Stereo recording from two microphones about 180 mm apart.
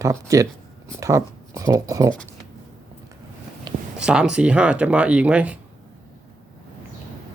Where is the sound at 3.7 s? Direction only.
20° right (ahead or behind).